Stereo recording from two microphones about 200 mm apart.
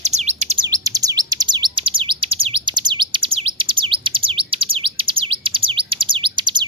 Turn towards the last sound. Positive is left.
turn(degrees=-25)  # may be behind; listen again after turning